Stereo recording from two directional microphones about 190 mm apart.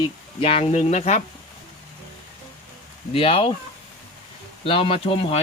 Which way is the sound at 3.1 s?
30° left (ahead or behind).